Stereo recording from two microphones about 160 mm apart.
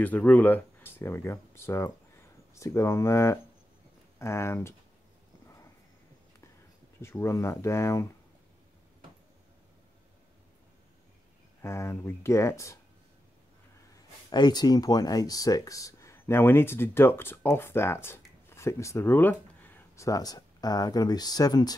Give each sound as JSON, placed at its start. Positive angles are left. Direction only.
{"t": 0.0, "sound": "speech", "side_deg": 10}
{"t": 7.0, "sound": "speech", "side_deg": 15}
{"t": 11.6, "sound": "speech", "side_deg": 15}
{"t": 13.9, "sound": "speech", "side_deg": 25}